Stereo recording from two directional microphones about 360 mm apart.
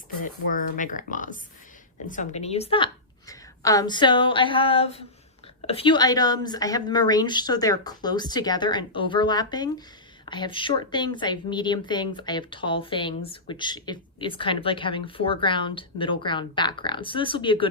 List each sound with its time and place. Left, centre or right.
0.5 s speech: left